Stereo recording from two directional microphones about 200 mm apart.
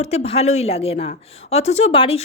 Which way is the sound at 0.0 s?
35° left (ahead or behind).